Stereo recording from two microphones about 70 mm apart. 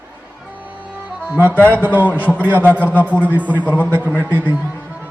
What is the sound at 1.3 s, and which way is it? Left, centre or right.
Speech, right.